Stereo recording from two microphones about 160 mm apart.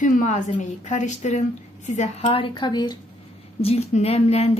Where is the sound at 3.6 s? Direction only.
40° left (ahead or behind).